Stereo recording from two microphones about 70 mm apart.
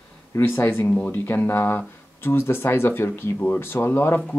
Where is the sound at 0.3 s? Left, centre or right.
Left.